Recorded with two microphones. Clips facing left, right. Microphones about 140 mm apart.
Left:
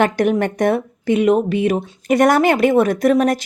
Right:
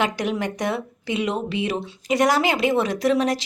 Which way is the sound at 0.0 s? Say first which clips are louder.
Left 8 dB; 55° left (ahead or behind).